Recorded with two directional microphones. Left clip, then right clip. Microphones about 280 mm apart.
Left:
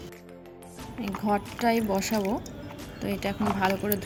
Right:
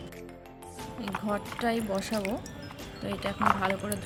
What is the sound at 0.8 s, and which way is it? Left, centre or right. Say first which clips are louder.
Speech: left 2 dB; centre.